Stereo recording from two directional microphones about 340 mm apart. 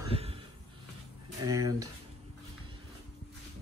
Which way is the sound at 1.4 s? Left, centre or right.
Centre.